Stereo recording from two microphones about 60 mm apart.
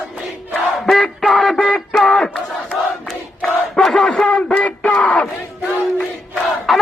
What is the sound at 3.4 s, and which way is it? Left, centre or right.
Battle cry, centre.